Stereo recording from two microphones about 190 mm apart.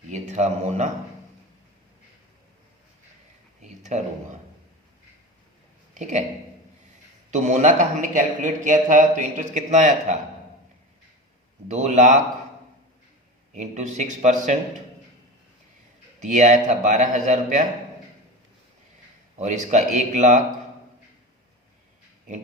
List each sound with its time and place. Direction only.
0.1 s a man's voice: 40° right (ahead or behind)
3.6 s a sound: 40° right (ahead or behind)
5.9 s a man's voice: 40° right (ahead or behind)
7.3 s a man's voice: 40° right (ahead or behind)
11.7 s a man's voice: 40° right (ahead or behind)
13.5 s a man's voice: 40° right (ahead or behind)
16.2 s a man's voice: 40° right (ahead or behind)
19.4 s a man's voice: 40° right (ahead or behind)